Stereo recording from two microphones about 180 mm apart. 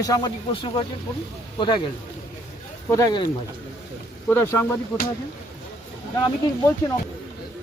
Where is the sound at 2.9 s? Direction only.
20° left (ahead or behind).